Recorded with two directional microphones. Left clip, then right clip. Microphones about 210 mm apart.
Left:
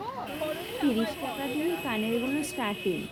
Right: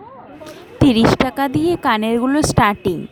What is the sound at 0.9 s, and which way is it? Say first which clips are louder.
A woman's voice: right 16 dB; 50° right (ahead or behind).